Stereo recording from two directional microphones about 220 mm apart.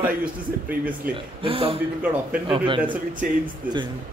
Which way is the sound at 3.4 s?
20° right (ahead or behind).